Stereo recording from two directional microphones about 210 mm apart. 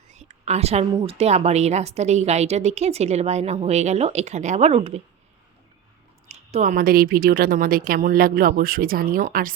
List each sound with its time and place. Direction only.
0.1 s a woman's voice: 30° right (ahead or behind)
6.2 s a woman's voice: 35° right (ahead or behind)